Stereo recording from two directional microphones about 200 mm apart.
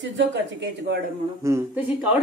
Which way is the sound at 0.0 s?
65° right (ahead or behind).